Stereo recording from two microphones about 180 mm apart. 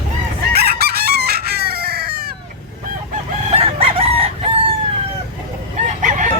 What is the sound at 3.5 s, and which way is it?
Chicken, 30° right (ahead or behind).